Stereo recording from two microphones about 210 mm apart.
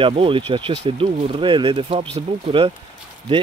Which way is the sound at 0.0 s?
25° right (ahead or behind).